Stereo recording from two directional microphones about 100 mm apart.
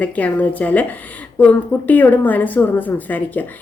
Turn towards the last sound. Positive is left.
turn(degrees=15)  # may be behind; listen again after turning